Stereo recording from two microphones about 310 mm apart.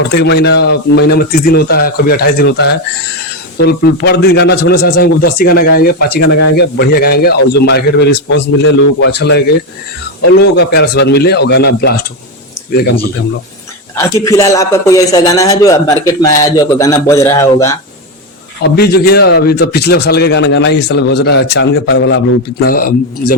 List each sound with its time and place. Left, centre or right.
0.1 s a man's voice: left
10.6 s a man's voice: left
13.9 s a man's voice: centre
18.6 s a man's voice: left